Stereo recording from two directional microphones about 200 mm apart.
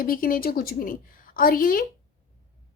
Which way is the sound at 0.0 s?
45° left (ahead or behind).